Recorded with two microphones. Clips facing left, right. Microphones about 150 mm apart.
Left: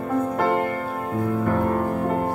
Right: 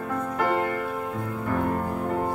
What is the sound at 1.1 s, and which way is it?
Music, 55° left (ahead or behind).